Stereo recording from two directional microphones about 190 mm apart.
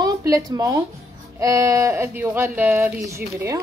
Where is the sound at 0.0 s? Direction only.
20° right (ahead or behind).